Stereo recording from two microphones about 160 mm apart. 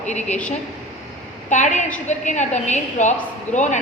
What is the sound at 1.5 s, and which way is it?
A woman's voice, 50° left (ahead or behind).